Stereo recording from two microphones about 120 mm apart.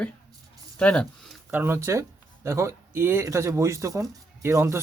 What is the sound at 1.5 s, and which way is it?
Speech, 20° right (ahead or behind).